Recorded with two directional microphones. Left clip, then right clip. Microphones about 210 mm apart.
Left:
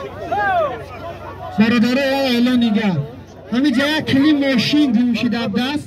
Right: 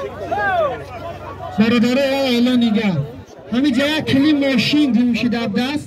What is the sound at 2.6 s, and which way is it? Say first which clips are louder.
Speech: even; 20° right (ahead or behind).